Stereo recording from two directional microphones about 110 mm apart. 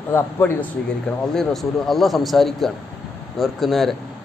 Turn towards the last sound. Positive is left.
turn(degrees=0)  # may be behind; listen again after turning